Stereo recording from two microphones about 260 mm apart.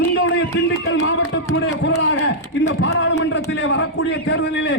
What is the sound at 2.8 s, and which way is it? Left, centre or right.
A man's voice, left.